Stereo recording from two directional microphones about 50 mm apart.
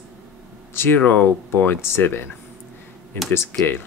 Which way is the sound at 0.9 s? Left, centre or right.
Left.